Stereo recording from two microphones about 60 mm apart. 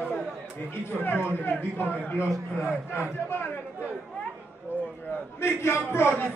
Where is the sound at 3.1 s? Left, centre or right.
Left.